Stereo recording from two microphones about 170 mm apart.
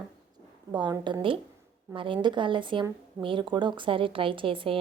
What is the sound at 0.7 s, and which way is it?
Speech, 25° right (ahead or behind).